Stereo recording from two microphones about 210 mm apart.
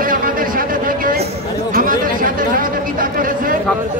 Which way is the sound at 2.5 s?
40° right (ahead or behind).